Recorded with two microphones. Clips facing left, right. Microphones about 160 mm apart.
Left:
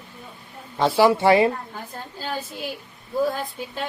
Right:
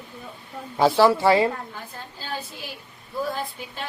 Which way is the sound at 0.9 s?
20° left (ahead or behind).